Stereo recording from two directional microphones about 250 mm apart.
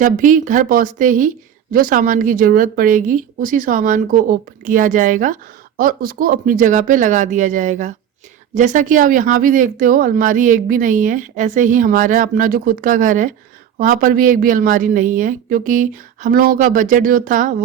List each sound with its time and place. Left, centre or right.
0.0 s speech: right